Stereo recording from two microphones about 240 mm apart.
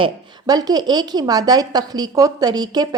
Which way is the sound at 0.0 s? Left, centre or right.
Centre.